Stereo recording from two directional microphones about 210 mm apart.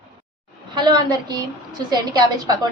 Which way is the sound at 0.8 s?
20° right (ahead or behind).